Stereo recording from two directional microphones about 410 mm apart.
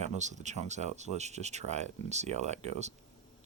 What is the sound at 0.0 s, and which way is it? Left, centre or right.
Speech, centre.